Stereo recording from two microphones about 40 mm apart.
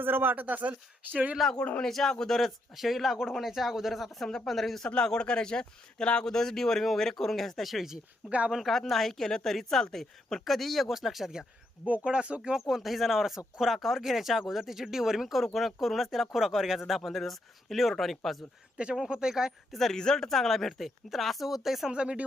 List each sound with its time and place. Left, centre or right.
0.0 s speech: right
1.8 s speech: centre
2.7 s speech: centre
5.0 s speech: left; by 7.9 s centre
8.2 s speech: right
8.6 s speech: centre
12.0 s speech: right
12.4 s speech: centre
18.8 s speech: right
19.1 s speech: centre
19.7 s speech: centre
21.8 s speech: right